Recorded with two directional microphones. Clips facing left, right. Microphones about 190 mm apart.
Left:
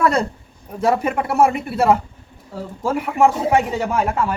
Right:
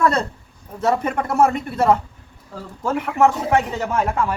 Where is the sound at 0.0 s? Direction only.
10° left (ahead or behind).